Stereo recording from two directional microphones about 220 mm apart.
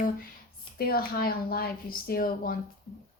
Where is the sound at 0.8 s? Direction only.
45° left (ahead or behind).